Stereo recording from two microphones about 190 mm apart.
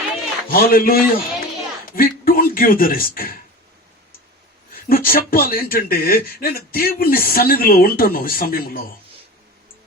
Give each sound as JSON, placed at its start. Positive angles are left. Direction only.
{"t": 0.5, "sound": "a man's voice", "side_deg": 50}
{"t": 4.7, "sound": "speech", "side_deg": 50}